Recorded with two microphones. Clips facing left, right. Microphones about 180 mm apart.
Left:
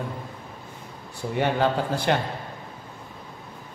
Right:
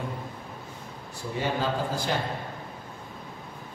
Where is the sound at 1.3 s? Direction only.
65° left (ahead or behind).